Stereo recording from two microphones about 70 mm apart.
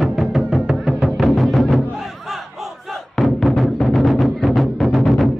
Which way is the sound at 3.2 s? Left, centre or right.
Centre.